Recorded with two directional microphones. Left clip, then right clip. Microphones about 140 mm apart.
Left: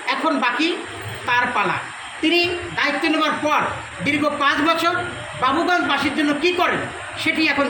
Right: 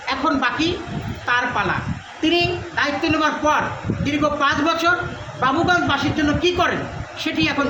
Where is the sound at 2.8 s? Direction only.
10° right (ahead or behind).